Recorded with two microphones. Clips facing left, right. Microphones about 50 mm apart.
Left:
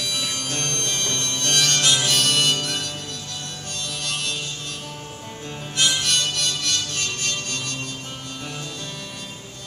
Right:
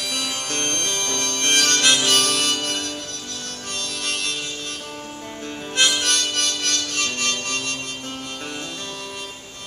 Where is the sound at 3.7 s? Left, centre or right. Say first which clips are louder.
Right 2 dB; right.